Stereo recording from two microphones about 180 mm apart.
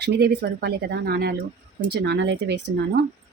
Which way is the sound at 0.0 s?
65° right (ahead or behind).